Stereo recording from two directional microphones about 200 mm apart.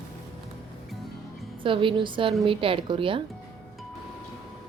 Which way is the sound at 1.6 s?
25° right (ahead or behind).